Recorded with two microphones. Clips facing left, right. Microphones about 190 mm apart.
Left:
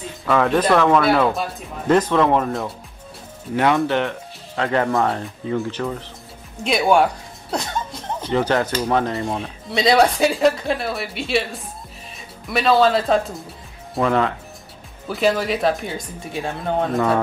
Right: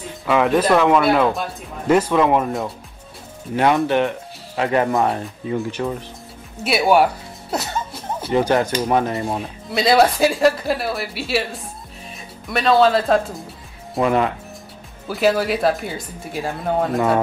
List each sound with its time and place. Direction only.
0.3 s speech: 10° right (ahead or behind)
12.4 s speech: centre (ahead or behind)
13.9 s speech: 20° right (ahead or behind)
15.0 s speech: 5° right (ahead or behind)